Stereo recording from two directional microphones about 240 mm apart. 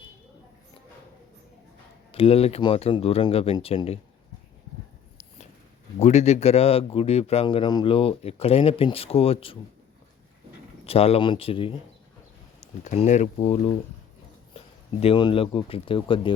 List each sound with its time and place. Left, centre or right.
2.1 s speech: left
6.0 s speech: left
10.8 s speech: left
12.8 s speech: left
15.0 s speech: left